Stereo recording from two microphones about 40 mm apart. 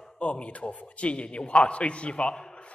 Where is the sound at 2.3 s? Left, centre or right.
Centre.